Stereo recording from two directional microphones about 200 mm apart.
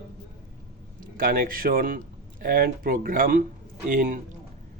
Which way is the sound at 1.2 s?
45° right (ahead or behind).